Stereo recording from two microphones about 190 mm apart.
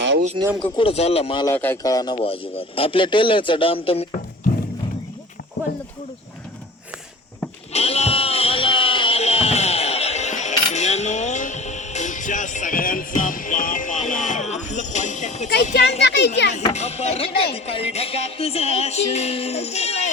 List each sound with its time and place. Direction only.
0.4 s speech: 25° right (ahead or behind)
0.8 s speech: 30° left (ahead or behind)
1.5 s speech: 10° left (ahead or behind); by 4.0 s 30° left (ahead or behind)
7.7 s a sound: 35° left (ahead or behind)
16.0 s a child's voice: 65° left (ahead or behind)
16.6 s speech: 35° left (ahead or behind)